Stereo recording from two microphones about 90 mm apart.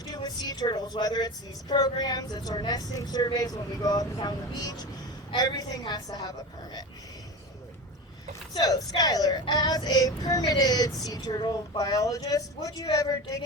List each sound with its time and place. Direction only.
0.0 s speech: 45° left (ahead or behind)
1.7 s child singing: 50° left (ahead or behind)
8.5 s child singing: 45° left (ahead or behind)